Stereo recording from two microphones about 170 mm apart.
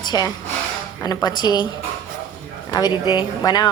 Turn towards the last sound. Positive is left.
turn(degrees=25)  # may be behind; listen again after turning